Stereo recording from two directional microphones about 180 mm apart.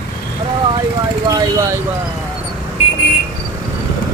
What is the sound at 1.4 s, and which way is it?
Vehicle, 15° right (ahead or behind).